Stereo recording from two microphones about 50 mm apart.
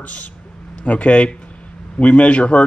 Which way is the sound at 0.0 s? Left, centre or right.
Left.